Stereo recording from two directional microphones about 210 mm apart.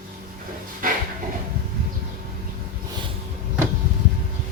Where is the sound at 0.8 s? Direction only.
40° right (ahead or behind).